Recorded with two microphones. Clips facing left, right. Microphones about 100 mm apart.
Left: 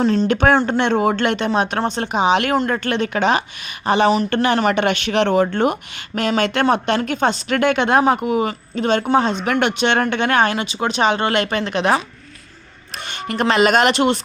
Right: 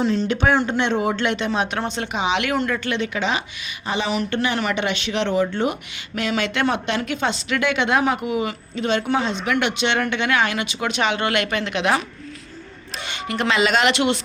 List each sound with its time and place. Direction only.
0.0 s speech: 45° left (ahead or behind)
13.1 s speech: 50° left (ahead or behind)